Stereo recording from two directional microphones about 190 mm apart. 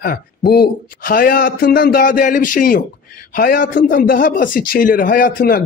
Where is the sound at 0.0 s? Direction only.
50° left (ahead or behind).